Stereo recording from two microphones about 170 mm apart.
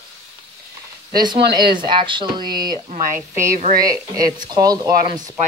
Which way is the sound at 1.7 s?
30° right (ahead or behind).